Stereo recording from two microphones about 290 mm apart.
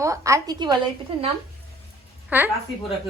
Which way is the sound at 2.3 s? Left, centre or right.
Centre.